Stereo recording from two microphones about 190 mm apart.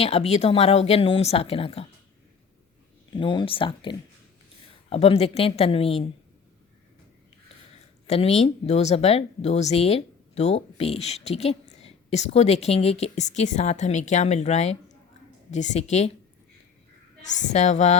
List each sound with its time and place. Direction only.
0.0 s speech: 35° left (ahead or behind)
3.2 s speech: 25° left (ahead or behind)
8.0 s speech: 35° left (ahead or behind)
17.3 s speech: 35° left (ahead or behind)